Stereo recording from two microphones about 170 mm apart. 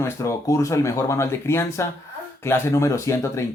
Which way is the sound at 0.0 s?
15° left (ahead or behind).